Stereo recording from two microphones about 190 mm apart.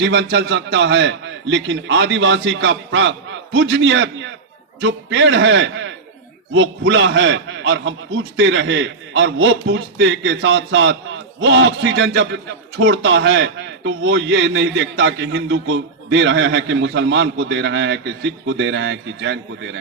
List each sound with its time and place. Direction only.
0.0 s a man's voice: 70° right (ahead or behind)